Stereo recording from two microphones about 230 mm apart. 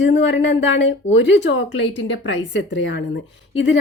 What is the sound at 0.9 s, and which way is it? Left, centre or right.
Speech, left.